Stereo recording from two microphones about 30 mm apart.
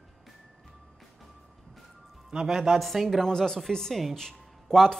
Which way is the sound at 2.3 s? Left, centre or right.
Right.